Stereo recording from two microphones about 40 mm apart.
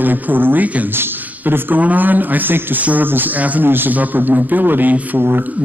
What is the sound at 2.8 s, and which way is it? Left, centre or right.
Speech, right.